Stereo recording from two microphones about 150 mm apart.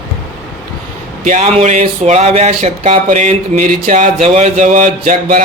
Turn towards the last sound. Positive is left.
turn(degrees=-60)  # may be behind; listen again after turning